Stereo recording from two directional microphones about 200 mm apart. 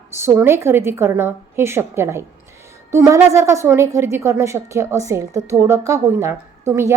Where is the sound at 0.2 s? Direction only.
10° right (ahead or behind).